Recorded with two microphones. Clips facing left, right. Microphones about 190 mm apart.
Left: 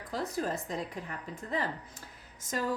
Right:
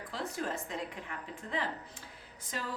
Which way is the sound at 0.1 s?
40° left (ahead or behind).